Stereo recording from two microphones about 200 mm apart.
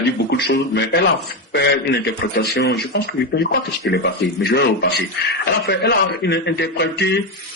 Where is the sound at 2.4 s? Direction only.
55° left (ahead or behind).